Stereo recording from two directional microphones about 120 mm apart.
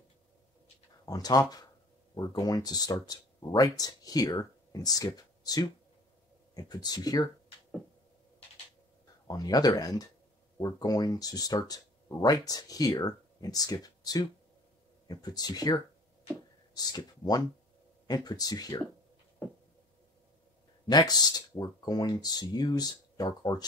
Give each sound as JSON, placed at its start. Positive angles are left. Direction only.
{"t": 1.0, "sound": "speech", "side_deg": 35}
{"t": 9.3, "sound": "speech", "side_deg": 35}
{"t": 20.8, "sound": "speech", "side_deg": 35}